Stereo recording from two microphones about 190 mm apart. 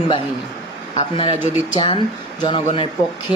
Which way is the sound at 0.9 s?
25° left (ahead or behind).